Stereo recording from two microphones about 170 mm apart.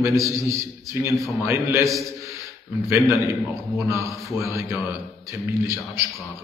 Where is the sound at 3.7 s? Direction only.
15° right (ahead or behind).